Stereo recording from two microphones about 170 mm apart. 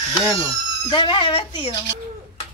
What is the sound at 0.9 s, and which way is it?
Speech, 30° left (ahead or behind).